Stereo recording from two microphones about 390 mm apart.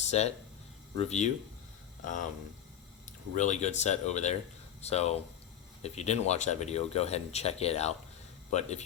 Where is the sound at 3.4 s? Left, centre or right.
Centre.